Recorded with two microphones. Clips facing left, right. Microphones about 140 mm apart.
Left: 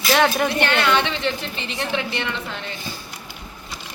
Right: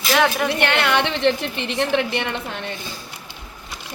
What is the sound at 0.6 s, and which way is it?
A woman's voice, 65° right (ahead or behind).